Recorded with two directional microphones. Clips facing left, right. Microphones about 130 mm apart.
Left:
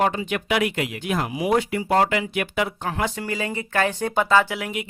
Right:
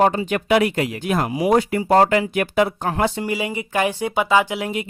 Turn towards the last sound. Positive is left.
turn(degrees=-30)  # may be behind; listen again after turning